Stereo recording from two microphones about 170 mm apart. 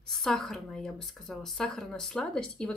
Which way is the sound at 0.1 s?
Centre (ahead or behind).